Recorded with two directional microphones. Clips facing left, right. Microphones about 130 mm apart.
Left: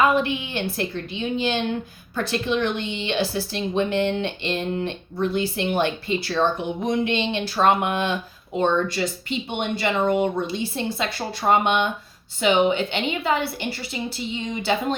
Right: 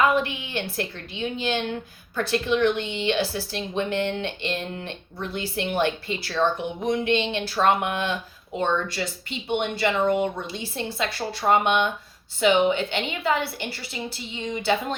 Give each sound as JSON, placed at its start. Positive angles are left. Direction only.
{"t": 0.2, "sound": "speech", "side_deg": 25}